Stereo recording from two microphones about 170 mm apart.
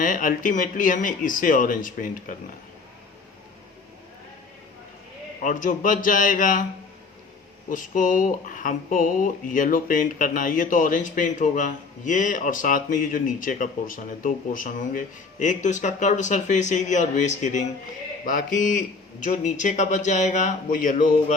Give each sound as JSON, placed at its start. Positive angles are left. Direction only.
{"t": 0.0, "sound": "speech", "side_deg": 50}
{"t": 5.4, "sound": "speech", "side_deg": 50}
{"t": 7.7, "sound": "speech", "side_deg": 50}